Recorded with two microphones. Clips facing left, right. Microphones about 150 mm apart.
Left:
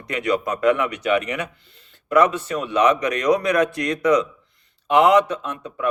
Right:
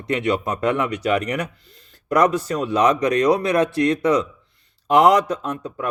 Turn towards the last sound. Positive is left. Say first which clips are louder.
# left 1 dB
turn(degrees=-35)  # may be behind; listen again after turning